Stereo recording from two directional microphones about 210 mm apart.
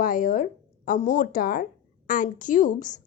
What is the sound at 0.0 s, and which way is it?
A woman's voice, 40° left (ahead or behind).